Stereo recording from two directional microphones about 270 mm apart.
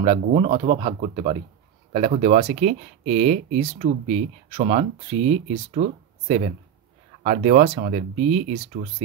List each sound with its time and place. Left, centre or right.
0.0 s speech: right